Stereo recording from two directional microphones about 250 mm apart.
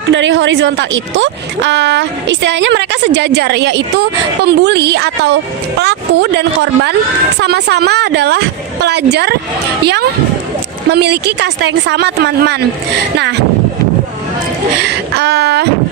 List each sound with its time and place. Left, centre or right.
0.1 s a woman's voice: right
10.9 s a woman's voice: right
14.8 s speech: right